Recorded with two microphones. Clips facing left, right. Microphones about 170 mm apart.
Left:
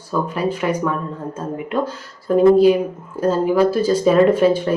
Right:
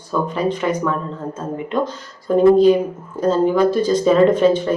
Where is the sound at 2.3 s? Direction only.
10° left (ahead or behind).